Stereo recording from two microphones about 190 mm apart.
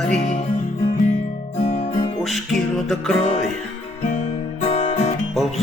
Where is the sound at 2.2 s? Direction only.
Centre (ahead or behind).